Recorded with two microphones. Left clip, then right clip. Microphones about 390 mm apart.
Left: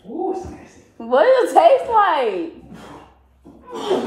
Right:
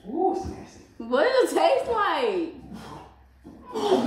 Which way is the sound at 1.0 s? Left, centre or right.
Centre.